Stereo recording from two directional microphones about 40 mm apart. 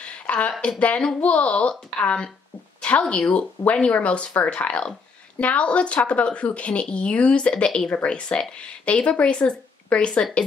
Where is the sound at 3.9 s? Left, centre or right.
Left.